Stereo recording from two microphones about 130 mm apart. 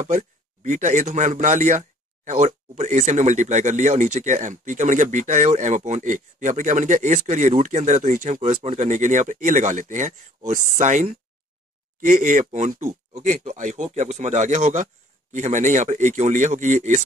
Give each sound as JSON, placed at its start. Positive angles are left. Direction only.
{"t": 0.0, "sound": "speech", "side_deg": -70}
{"t": 12.0, "sound": "speech", "side_deg": -80}